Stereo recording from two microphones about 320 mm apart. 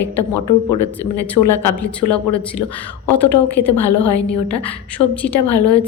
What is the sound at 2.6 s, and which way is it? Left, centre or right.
Speech, left.